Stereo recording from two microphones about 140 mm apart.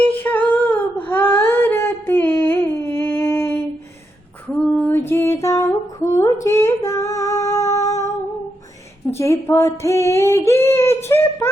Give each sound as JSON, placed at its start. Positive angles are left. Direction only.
{"t": 0.0, "sound": "a sound", "side_deg": 10}
{"t": 4.8, "sound": "music", "side_deg": 15}
{"t": 6.1, "sound": "female singing", "side_deg": 20}
{"t": 9.0, "sound": "female singing", "side_deg": 20}